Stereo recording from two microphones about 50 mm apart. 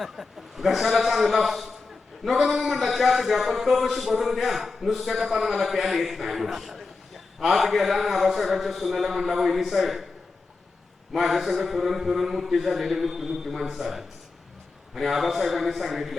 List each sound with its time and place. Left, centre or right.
0.0 s a man's voice: centre
11.1 s a man's voice: centre